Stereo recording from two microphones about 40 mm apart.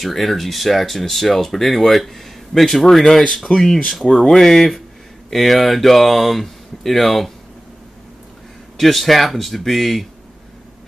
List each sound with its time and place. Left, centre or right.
0.0 s speech: centre
5.3 s speech: centre
8.7 s speech: centre